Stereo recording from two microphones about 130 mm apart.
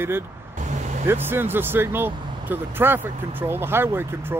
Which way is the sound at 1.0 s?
15° right (ahead or behind).